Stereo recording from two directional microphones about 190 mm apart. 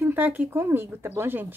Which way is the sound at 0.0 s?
10° right (ahead or behind).